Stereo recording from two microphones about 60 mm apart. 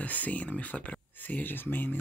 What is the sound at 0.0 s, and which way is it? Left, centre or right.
Speech, left.